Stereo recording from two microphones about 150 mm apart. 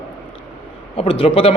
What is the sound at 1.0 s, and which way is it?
Speech, 40° left (ahead or behind).